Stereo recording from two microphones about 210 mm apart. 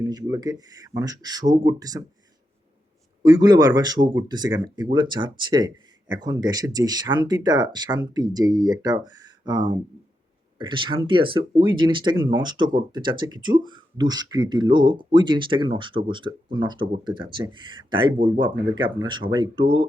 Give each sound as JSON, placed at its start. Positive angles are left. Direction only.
{"t": 0.0, "sound": "speech", "side_deg": -20}
{"t": 3.2, "sound": "speech", "side_deg": -20}